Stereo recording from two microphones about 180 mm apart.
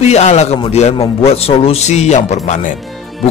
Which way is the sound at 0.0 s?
40° left (ahead or behind).